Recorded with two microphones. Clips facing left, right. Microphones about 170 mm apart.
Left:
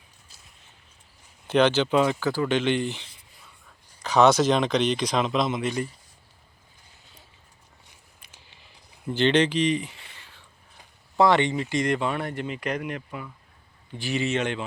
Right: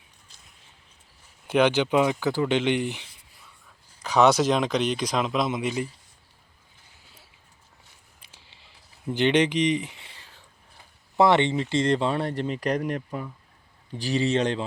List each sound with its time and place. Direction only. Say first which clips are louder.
1.5 s speech: even; 10° right (ahead or behind)
9.0 s speech: even; 15° right (ahead or behind)
11.2 s speech: right 1 dB; 20° right (ahead or behind)